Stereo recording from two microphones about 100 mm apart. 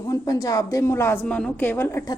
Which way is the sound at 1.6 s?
25° left (ahead or behind).